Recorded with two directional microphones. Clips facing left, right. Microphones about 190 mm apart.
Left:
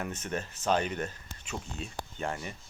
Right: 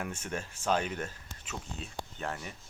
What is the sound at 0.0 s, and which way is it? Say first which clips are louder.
Speech: left 2 dB; 5° right (ahead or behind).